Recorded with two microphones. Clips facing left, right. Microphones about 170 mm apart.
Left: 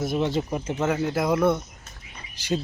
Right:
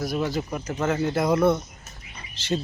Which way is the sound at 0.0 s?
25° left (ahead or behind).